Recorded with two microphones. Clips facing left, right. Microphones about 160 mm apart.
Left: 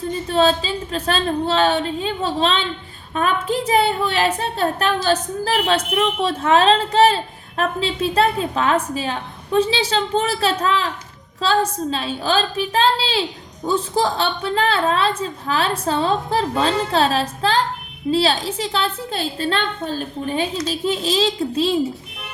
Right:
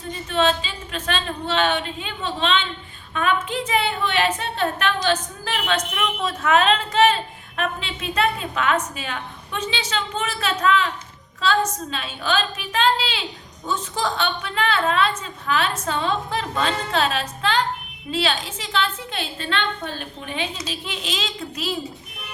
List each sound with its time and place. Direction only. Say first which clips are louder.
0.3 s a woman's voice: left 3 dB; 35° left (ahead or behind)